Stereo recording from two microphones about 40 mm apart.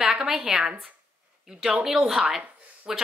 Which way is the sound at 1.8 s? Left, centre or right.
Centre.